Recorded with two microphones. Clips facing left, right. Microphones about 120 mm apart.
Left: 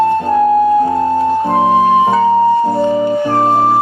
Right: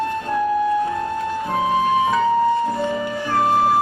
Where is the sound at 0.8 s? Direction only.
35° left (ahead or behind).